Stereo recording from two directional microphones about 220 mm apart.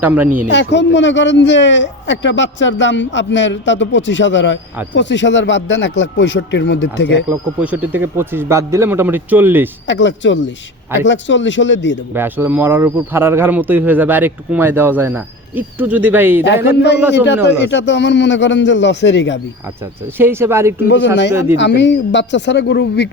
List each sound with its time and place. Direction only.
0.0 s speech: 10° right (ahead or behind)
0.5 s speech: 55° left (ahead or behind)
7.3 s speech: 5° right (ahead or behind)
9.8 s speech: 55° left (ahead or behind)
12.1 s speech: 10° right (ahead or behind)
16.6 s a man's voice: 50° left (ahead or behind)
20.1 s speech: 10° right (ahead or behind)
20.8 s a man's voice: 50° left (ahead or behind)